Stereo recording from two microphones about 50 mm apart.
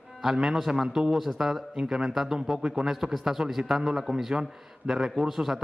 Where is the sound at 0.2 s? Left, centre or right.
Centre.